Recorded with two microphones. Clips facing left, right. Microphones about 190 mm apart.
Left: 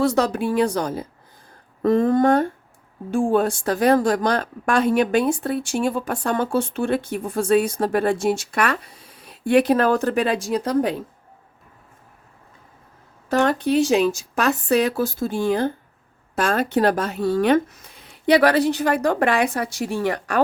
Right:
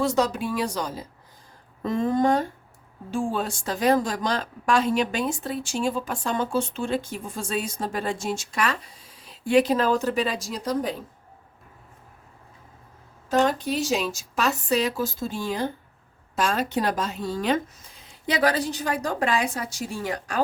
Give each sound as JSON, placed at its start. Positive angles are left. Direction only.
{"t": 0.0, "sound": "a woman's voice", "side_deg": 55}
{"t": 13.3, "sound": "a woman's voice", "side_deg": 65}